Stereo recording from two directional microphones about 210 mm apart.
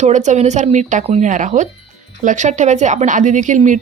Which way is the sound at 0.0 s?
35° right (ahead or behind).